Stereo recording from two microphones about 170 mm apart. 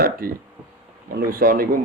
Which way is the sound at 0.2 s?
60° right (ahead or behind).